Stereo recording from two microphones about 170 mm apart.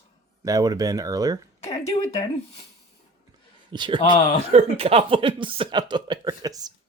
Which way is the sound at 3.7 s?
25° right (ahead or behind).